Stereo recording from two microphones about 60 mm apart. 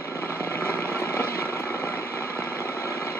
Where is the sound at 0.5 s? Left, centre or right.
Left.